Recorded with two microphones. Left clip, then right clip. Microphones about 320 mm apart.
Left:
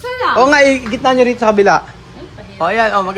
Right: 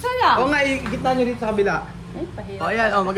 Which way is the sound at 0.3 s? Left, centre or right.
Centre.